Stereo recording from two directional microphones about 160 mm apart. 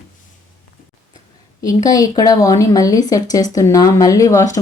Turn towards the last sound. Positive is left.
turn(degrees=20)  # may be behind; listen again after turning